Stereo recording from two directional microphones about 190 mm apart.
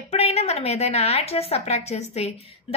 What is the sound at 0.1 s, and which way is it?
A woman's voice, 35° left (ahead or behind).